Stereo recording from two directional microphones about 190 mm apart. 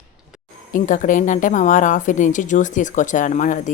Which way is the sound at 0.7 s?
45° left (ahead or behind).